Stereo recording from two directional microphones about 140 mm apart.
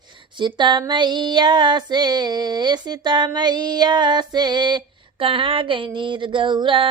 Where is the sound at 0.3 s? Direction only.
35° right (ahead or behind).